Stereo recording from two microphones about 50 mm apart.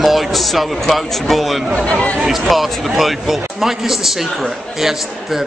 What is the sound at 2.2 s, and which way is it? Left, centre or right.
A man's voice, centre.